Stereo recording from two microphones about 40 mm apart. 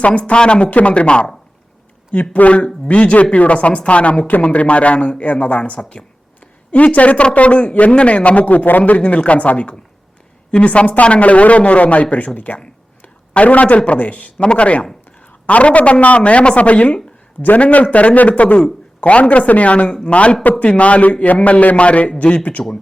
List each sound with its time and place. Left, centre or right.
0.0 s a man's voice: left
0.6 s a man's voice: left
2.3 s a man's voice: left
22.6 s speech: centre